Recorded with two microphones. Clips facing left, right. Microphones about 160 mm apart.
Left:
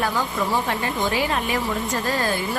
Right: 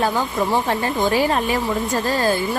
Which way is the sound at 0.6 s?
35° right (ahead or behind).